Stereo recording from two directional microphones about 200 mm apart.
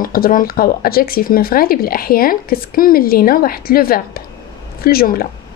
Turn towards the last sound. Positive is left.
turn(degrees=50)  # may be behind; listen again after turning